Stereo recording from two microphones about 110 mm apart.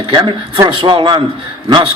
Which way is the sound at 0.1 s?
50° right (ahead or behind).